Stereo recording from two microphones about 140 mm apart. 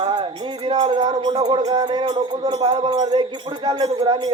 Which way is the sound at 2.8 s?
30° right (ahead or behind).